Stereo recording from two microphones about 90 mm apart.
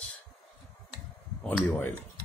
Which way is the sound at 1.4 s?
15° left (ahead or behind).